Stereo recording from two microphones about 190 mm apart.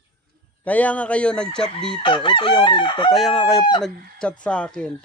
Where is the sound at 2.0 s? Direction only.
25° left (ahead or behind).